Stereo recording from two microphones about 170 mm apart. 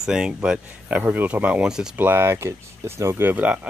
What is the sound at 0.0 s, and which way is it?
Speech, 5° right (ahead or behind).